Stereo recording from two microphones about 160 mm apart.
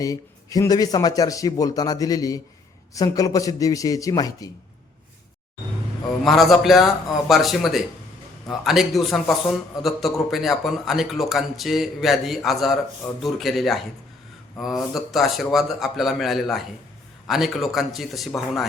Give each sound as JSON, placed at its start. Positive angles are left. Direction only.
{"t": 0.0, "sound": "a man's voice", "side_deg": 20}
{"t": 6.2, "sound": "speech", "side_deg": 0}